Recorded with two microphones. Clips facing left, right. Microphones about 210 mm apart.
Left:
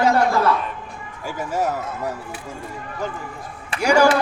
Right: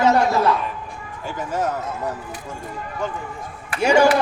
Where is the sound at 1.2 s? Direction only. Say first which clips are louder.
Left 1 dB; 10° left (ahead or behind).